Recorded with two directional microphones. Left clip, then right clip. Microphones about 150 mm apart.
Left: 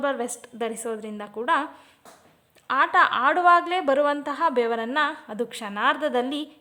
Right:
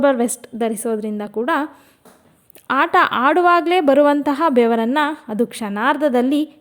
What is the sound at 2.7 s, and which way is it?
A woman's voice, 35° right (ahead or behind).